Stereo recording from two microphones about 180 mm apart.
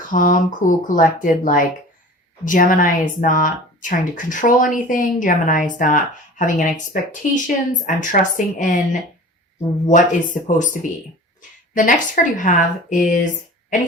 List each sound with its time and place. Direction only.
0.1 s speech: 50° left (ahead or behind)